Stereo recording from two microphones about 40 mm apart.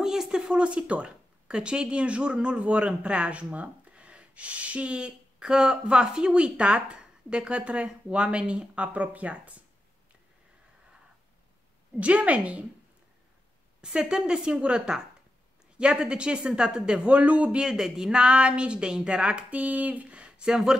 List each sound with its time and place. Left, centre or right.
0.0 s speech: centre
0.5 s speech: right
12.0 s a woman's voice: right
13.7 s speech: right
15.8 s speech: right
17.2 s a woman's voice: right
17.6 s speech: centre
18.1 s speech: right
19.5 s speech: right